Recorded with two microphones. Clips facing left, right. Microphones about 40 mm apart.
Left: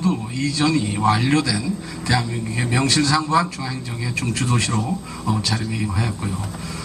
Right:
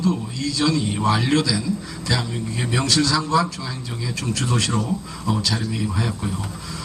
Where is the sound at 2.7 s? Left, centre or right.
Left.